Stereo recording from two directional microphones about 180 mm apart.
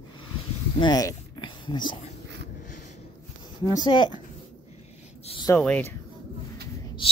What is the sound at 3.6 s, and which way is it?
Speech, 25° left (ahead or behind).